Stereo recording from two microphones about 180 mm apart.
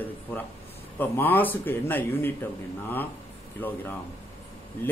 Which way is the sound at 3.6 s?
10° left (ahead or behind).